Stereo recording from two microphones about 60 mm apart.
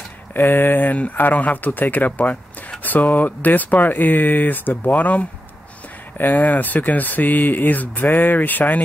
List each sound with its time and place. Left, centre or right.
0.3 s speech: left